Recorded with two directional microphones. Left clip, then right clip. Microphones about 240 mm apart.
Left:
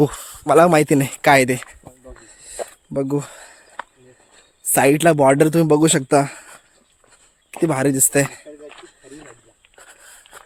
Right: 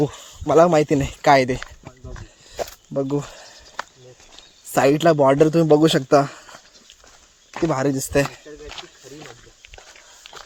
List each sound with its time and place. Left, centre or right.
0.0 s speech: left
2.9 s speech: left
3.8 s a sound: right
4.7 s speech: left
7.7 s speech: left
10.3 s shuffle: right